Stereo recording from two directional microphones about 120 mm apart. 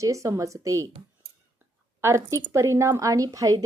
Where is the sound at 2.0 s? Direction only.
25° right (ahead or behind).